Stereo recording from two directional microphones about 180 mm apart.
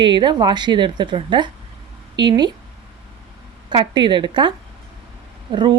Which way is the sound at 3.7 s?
25° right (ahead or behind).